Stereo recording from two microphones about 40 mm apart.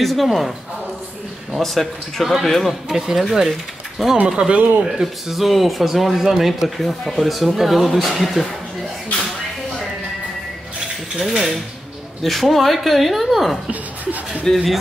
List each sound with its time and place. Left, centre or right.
0.0 s speech: centre
1.6 s speech: centre
4.5 s speech: right
4.8 s speech: centre
6.8 s speech: centre
11.1 s speech: centre